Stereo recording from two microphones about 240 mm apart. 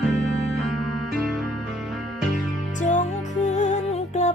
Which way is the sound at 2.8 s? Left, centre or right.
Left.